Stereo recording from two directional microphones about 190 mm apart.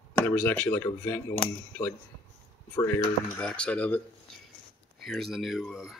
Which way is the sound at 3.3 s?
5° left (ahead or behind).